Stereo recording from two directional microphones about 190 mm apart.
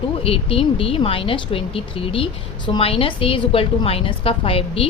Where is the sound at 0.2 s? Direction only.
30° left (ahead or behind).